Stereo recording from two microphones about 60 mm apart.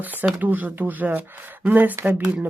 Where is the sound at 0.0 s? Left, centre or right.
Right.